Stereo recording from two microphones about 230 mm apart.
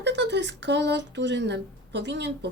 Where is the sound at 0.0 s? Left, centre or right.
Right.